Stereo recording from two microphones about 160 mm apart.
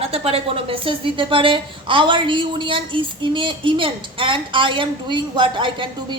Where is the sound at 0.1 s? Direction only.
40° right (ahead or behind).